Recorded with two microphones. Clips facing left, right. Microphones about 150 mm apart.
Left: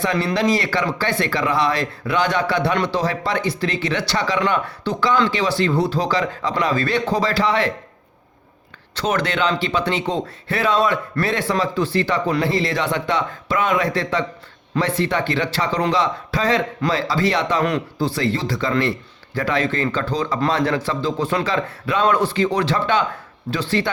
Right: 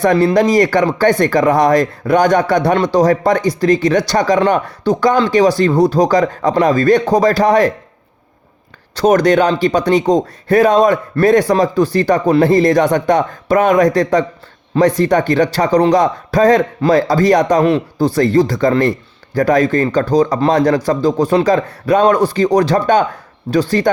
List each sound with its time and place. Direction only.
0.0 s speech: 50° right (ahead or behind)
9.0 s a man's voice: 40° right (ahead or behind)